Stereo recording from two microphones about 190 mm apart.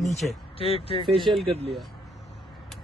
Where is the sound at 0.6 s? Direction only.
30° left (ahead or behind).